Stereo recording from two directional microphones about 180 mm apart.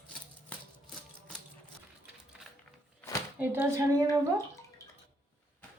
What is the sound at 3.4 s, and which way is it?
Speech, 10° right (ahead or behind).